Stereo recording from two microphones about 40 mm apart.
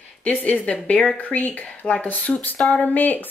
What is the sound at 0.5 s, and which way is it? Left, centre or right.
A woman's voice, left.